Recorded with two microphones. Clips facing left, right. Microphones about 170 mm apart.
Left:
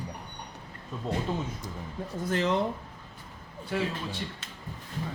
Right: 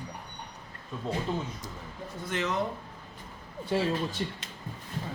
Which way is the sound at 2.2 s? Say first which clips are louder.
Left 4 dB; 35° left (ahead or behind).